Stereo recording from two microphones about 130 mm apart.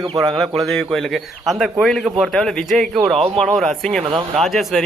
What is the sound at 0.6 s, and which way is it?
A man's voice, centre (ahead or behind).